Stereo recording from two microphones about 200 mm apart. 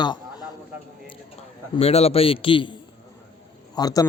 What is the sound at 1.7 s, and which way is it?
Speech, 30° left (ahead or behind).